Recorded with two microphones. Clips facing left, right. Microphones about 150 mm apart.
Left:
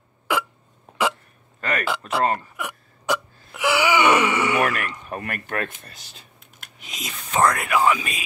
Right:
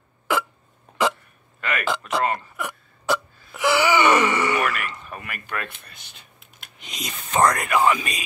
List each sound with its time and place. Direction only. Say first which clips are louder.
0.3 s hiccup: right 1 dB; 10° left (ahead or behind)
1.6 s speech: left 2 dB; 40° left (ahead or behind)
1.9 s speech: right 2 dB; 10° left (ahead or behind)
2.5 s gasp: right 1 dB; 10° left (ahead or behind)
5.1 s speech: left 8 dB; 45° left (ahead or behind)
6.6 s speech: right 1 dB; 5° left (ahead or behind)